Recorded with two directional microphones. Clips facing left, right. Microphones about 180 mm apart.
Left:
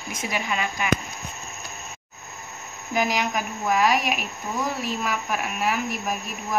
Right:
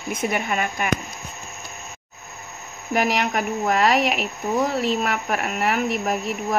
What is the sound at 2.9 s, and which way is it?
Speech, 65° right (ahead or behind).